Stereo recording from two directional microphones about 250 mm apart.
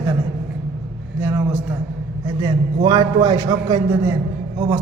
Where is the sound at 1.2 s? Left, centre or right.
Centre.